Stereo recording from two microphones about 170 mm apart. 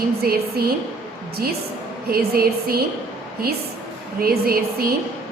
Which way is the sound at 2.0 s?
60° right (ahead or behind).